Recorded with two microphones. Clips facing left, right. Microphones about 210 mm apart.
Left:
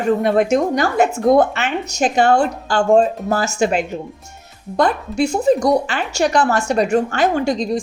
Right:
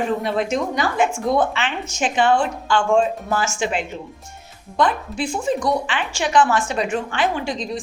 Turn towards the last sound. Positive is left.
turn(degrees=40)  # may be behind; listen again after turning